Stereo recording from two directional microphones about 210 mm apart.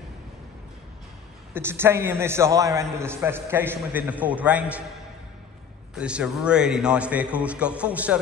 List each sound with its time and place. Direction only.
1.5 s a man's voice: 10° right (ahead or behind)
5.9 s a man's voice: 5° right (ahead or behind)